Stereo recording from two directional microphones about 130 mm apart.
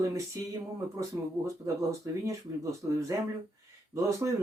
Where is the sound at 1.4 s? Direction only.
25° right (ahead or behind).